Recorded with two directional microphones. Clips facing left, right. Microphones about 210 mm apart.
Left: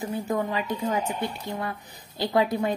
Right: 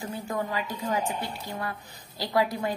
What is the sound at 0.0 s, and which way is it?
A woman's voice, 20° left (ahead or behind).